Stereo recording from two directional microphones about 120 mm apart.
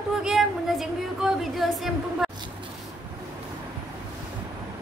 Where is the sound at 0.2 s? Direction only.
5° right (ahead or behind).